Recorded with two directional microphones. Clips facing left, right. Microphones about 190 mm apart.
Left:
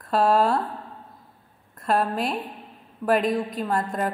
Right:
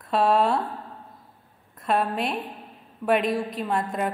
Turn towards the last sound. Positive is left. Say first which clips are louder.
# left 1 dB
turn(degrees=0)  # may be behind; listen again after turning